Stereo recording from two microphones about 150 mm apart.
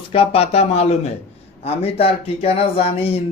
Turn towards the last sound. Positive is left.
turn(degrees=40)  # may be behind; listen again after turning